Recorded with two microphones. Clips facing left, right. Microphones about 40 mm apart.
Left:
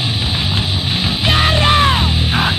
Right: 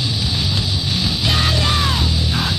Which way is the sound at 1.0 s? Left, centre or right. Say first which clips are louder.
Left 5 dB; left.